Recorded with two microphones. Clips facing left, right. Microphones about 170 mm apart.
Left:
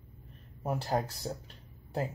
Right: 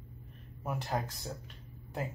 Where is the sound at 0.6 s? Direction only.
35° left (ahead or behind).